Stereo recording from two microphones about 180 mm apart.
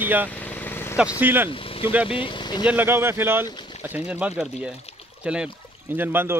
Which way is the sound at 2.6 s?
10° right (ahead or behind).